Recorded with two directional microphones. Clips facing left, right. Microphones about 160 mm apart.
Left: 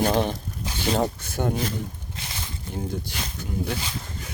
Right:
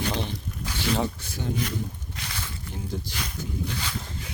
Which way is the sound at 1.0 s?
50° left (ahead or behind).